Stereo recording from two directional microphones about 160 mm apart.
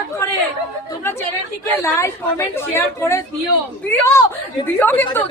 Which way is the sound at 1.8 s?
20° left (ahead or behind).